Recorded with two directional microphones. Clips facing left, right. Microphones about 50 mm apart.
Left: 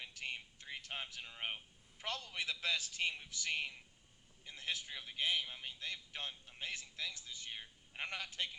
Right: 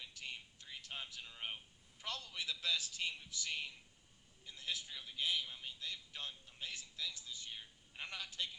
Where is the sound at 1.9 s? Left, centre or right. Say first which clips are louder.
Left 3 dB; left.